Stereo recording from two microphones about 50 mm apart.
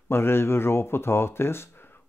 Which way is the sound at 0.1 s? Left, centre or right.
Left.